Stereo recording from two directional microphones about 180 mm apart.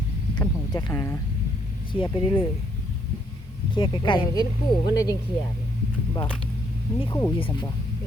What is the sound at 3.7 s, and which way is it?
Speech, 30° left (ahead or behind).